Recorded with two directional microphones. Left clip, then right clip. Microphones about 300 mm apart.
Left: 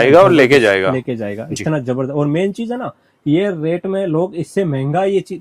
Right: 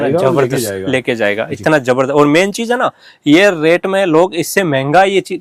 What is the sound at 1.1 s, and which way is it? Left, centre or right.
Speech, centre.